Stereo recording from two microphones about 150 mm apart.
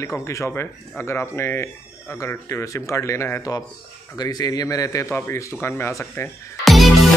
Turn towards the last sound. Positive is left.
turn(degrees=0)  # may be behind; listen again after turning